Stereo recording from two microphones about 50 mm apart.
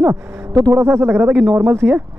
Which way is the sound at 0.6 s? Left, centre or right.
Right.